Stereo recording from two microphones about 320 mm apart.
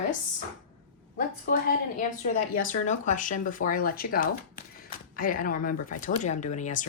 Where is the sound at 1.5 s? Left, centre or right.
Left.